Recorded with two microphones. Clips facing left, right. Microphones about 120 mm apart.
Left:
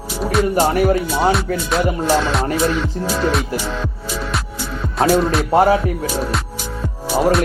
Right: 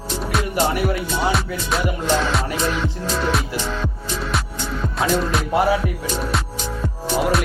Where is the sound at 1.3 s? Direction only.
Centre (ahead or behind).